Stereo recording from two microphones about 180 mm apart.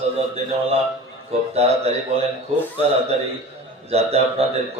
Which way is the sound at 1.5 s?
35° right (ahead or behind).